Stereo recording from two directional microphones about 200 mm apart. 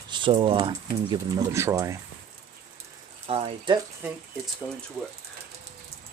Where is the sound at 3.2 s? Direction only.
30° right (ahead or behind).